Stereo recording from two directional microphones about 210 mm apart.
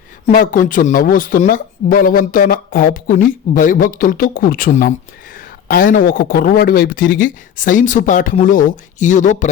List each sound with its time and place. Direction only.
0.3 s speech: 40° left (ahead or behind)